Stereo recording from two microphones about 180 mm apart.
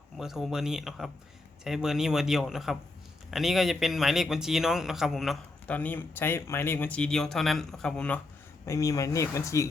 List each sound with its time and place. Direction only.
0.2 s a man's voice: centre (ahead or behind)
8.6 s speech: 15° left (ahead or behind)